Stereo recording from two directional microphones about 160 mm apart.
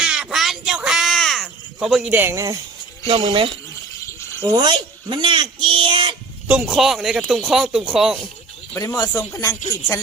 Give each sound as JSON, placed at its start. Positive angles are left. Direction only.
{"t": 0.0, "sound": "a sound", "side_deg": -5}
{"t": 3.1, "sound": "speech", "side_deg": -35}
{"t": 4.0, "sound": "cricket", "side_deg": 15}
{"t": 4.4, "sound": "a sound", "side_deg": -30}
{"t": 6.5, "sound": "speech", "side_deg": -5}
{"t": 8.7, "sound": "speech", "side_deg": 20}